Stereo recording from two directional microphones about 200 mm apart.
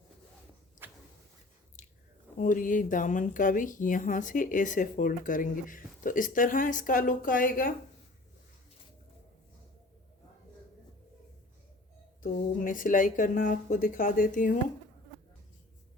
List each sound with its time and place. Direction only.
2.4 s a woman's voice: 40° left (ahead or behind)
12.2 s a woman's voice: 40° left (ahead or behind)